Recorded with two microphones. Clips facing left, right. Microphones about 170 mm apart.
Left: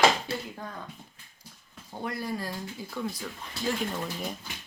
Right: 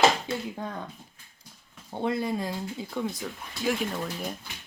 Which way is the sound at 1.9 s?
25° right (ahead or behind).